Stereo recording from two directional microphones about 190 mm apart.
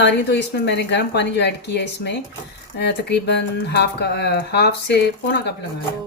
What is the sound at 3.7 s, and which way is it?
Speech, 60° left (ahead or behind).